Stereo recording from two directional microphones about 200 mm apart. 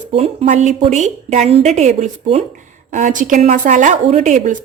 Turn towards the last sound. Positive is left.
turn(degrees=-35)  # may be behind; listen again after turning